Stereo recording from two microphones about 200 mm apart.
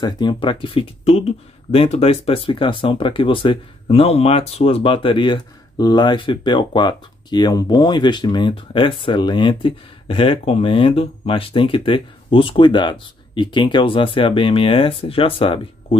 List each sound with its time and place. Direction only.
0.0 s speech: 20° left (ahead or behind)